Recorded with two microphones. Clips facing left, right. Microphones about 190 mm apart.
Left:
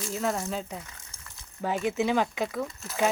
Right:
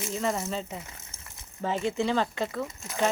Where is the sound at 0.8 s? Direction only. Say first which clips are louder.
Right 2 dB; 25° right (ahead or behind).